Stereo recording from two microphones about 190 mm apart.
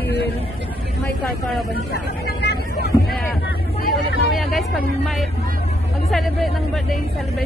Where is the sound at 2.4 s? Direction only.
60° left (ahead or behind).